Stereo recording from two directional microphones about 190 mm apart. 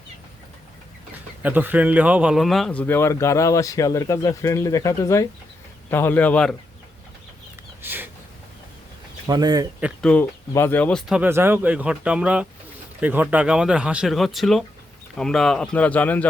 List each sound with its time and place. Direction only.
1.4 s speech: 10° right (ahead or behind)
7.8 s a sound: 10° right (ahead or behind)
9.2 s speech: 20° right (ahead or behind)
10.0 s speech: 10° left (ahead or behind)